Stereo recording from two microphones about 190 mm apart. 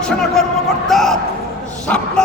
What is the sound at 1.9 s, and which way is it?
Dog, 5° left (ahead or behind).